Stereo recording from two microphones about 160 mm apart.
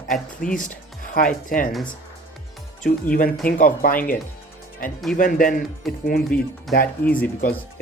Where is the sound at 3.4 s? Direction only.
60° left (ahead or behind).